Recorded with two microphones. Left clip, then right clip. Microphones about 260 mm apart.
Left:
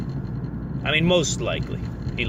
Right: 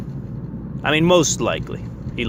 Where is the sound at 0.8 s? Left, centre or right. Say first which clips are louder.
Right 5 dB; right.